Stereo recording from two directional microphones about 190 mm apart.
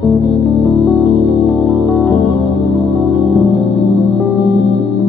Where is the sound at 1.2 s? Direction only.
Centre (ahead or behind).